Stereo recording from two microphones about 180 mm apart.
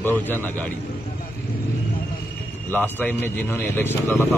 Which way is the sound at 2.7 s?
10° left (ahead or behind).